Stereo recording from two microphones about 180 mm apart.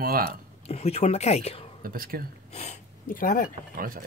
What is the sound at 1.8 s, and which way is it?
Speech, 55° right (ahead or behind).